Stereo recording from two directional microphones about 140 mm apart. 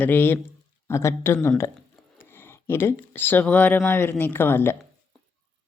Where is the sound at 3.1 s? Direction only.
15° left (ahead or behind).